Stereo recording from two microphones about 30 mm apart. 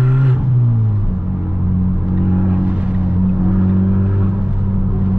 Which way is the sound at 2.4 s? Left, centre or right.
Right.